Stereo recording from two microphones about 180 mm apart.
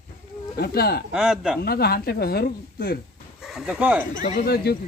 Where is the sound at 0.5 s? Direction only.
60° left (ahead or behind).